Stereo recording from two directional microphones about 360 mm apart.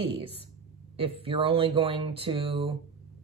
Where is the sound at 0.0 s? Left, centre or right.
Centre.